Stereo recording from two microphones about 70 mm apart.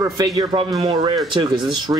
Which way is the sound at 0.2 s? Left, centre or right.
Right.